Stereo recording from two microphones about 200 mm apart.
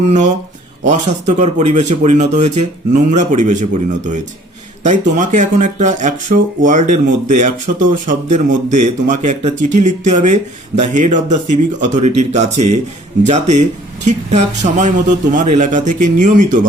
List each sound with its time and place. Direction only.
0.1 s speech: 35° right (ahead or behind)